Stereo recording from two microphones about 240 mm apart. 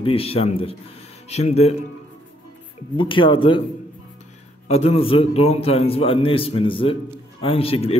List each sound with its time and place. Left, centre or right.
0.0 s a man's voice: left
3.0 s a man's voice: left
4.6 s a man's voice: left